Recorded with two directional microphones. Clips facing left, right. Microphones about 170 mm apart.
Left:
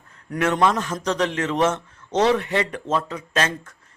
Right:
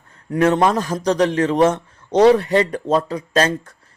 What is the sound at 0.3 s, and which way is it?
A man's voice, 30° right (ahead or behind).